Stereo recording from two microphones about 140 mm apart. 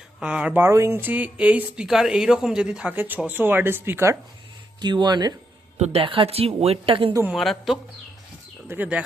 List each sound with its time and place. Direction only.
0.2 s speech: 5° right (ahead or behind)
4.8 s speech: 30° right (ahead or behind)
5.7 s speech: 50° right (ahead or behind)
7.1 s speech: 20° right (ahead or behind)
7.3 s speech: centre (ahead or behind)
8.6 s speech: 15° right (ahead or behind)